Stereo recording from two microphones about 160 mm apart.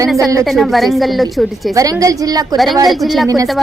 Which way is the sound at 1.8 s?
20° right (ahead or behind).